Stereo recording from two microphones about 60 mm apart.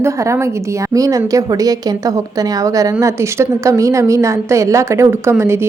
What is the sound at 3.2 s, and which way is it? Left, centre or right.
A woman's voice, right.